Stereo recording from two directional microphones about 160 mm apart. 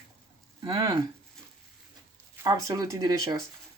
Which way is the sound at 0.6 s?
20° right (ahead or behind).